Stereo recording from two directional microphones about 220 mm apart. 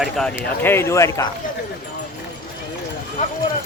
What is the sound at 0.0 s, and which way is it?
Speech, 5° left (ahead or behind).